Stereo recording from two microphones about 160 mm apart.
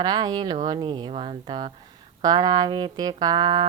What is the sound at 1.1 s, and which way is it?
Speech, 35° right (ahead or behind).